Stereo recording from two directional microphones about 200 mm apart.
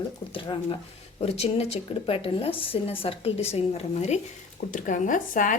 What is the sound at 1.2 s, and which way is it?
A woman's voice, 30° left (ahead or behind).